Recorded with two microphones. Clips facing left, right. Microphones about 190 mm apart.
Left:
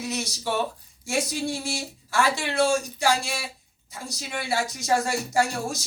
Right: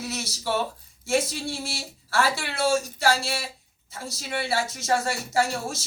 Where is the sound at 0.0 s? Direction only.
15° left (ahead or behind).